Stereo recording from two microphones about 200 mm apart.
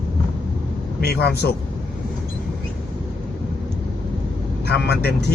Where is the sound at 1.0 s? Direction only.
55° left (ahead or behind).